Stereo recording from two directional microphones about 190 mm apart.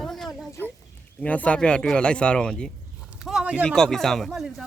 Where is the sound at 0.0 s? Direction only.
Centre (ahead or behind).